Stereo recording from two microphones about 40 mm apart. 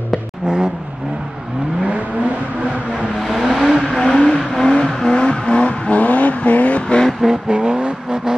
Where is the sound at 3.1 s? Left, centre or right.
Centre.